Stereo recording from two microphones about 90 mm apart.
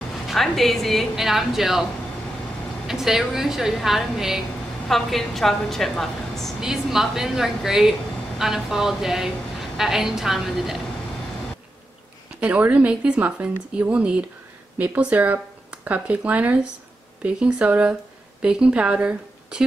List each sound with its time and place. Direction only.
0.3 s a woman's voice: centre (ahead or behind)
2.9 s a woman's voice: 5° right (ahead or behind)
12.4 s a woman's voice: 15° right (ahead or behind)